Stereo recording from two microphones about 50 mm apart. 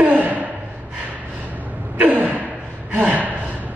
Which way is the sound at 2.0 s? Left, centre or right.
Right.